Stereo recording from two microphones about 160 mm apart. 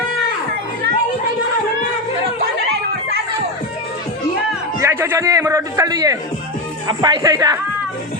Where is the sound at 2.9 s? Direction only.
80° right.